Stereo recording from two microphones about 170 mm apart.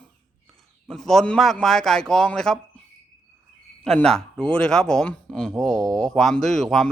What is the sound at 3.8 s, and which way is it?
Speech, 5° left (ahead or behind).